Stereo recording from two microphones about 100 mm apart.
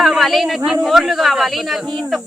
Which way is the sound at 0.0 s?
Centre (ahead or behind).